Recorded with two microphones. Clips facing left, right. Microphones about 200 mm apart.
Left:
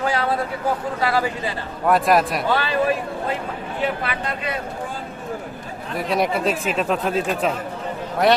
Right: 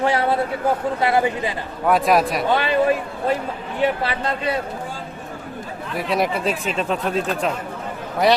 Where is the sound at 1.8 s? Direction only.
Centre (ahead or behind).